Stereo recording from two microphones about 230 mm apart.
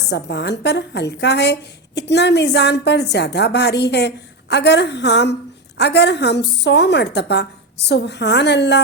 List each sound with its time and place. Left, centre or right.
0.1 s a woman's voice: left